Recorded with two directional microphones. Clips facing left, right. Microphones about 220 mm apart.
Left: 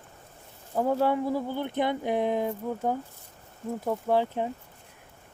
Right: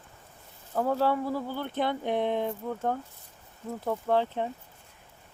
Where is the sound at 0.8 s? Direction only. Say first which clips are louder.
Left 2 dB; 15° left (ahead or behind).